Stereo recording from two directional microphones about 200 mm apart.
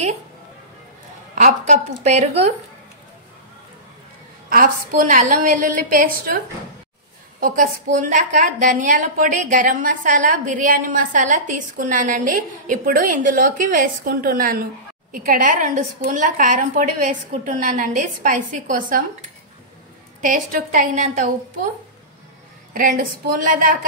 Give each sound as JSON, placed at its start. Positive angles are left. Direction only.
{"t": 1.3, "sound": "a woman's voice", "side_deg": -40}
{"t": 4.5, "sound": "a woman's voice", "side_deg": -45}
{"t": 7.3, "sound": "a woman's voice", "side_deg": -45}
{"t": 20.2, "sound": "a woman's voice", "side_deg": -40}
{"t": 22.7, "sound": "a woman's voice", "side_deg": -45}